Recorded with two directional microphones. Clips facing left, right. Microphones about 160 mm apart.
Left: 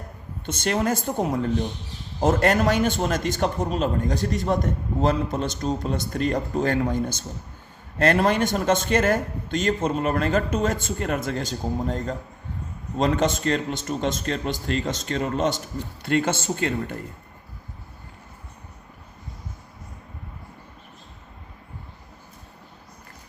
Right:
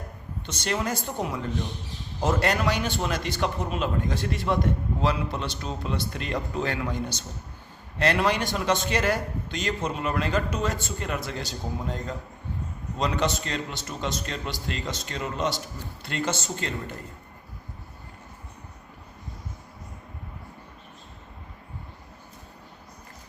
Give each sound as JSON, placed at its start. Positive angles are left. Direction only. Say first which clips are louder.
{"t": 0.4, "sound": "a man's voice", "louder": "left 5 dB", "side_deg": 50}